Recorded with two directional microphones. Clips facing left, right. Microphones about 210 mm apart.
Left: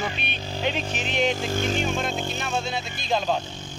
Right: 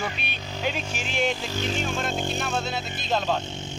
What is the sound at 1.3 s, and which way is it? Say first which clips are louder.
Speech: left 3 dB; 50° left (ahead or behind).